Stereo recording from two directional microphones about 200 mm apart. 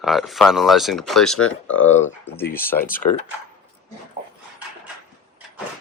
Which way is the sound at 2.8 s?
45° left (ahead or behind).